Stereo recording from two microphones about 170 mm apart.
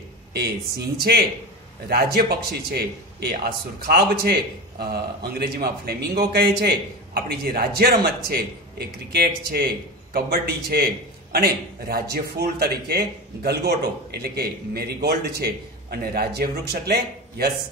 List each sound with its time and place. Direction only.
0.3 s a man's voice: 70° right (ahead or behind)
11.9 s a man's voice: 70° right (ahead or behind)